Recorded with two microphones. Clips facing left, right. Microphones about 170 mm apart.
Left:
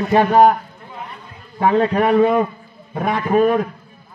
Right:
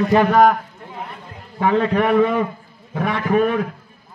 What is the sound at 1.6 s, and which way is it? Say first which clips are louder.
A man's voice: left 2 dB; 35° left (ahead or behind).